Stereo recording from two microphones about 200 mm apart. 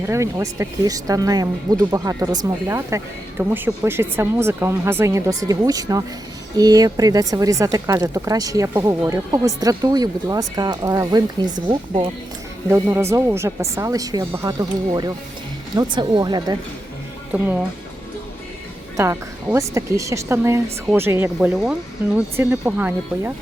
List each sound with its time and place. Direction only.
0.0 s speech: 15° right (ahead or behind)
12.6 s speech: 10° right (ahead or behind)
17.3 s speech: 10° right (ahead or behind)
18.9 s speech: 15° right (ahead or behind)